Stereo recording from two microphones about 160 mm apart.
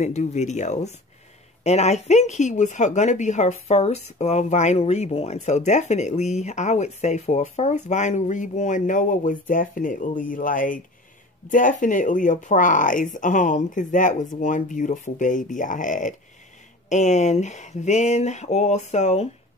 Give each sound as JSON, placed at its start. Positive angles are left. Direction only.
{"t": 0.0, "sound": "speech", "side_deg": 45}